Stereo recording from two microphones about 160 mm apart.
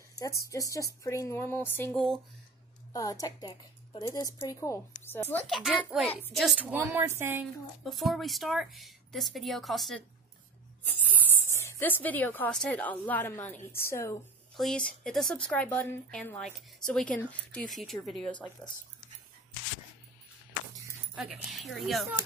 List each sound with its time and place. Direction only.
0.1 s speech: 20° left (ahead or behind)
2.9 s a woman's voice: 20° left (ahead or behind)
5.5 s a woman's voice: 5° right (ahead or behind)
7.8 s speech: centre (ahead or behind); by 14.1 s 15° left (ahead or behind)
14.6 s speech: 5° left (ahead or behind)
21.1 s speech: 5° right (ahead or behind)